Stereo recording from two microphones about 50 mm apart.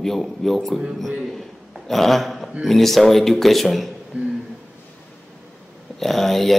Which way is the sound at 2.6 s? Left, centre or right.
Centre.